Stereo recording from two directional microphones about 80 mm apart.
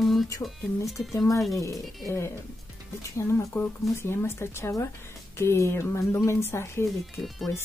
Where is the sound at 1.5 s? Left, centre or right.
Left.